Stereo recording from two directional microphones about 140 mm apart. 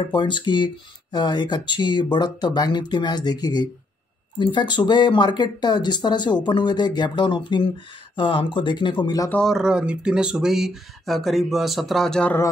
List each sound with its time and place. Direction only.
0.1 s speech: 35° left (ahead or behind)
9.3 s speech: centre (ahead or behind)